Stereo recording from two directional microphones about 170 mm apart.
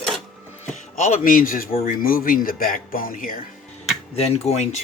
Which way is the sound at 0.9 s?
50° left (ahead or behind).